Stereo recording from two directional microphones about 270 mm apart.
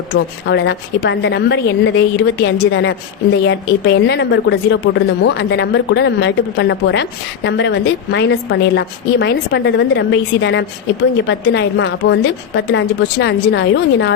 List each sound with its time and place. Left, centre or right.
0.4 s speech: left